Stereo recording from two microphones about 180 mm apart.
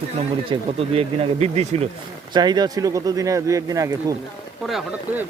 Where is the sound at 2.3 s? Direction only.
25° right (ahead or behind).